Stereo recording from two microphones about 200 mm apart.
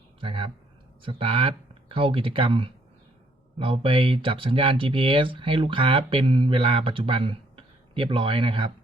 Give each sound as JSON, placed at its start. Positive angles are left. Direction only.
{"t": 0.2, "sound": "speech", "side_deg": -25}